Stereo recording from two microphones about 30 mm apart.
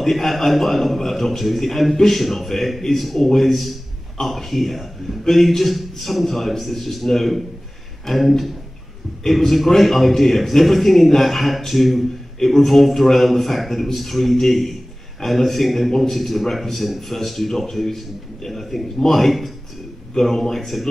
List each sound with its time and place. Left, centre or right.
0.0 s a man's voice: centre